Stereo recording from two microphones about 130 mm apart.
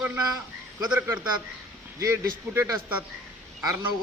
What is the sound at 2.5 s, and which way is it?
Speech, 20° right (ahead or behind).